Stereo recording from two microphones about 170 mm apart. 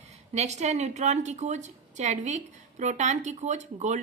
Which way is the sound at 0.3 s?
40° right (ahead or behind).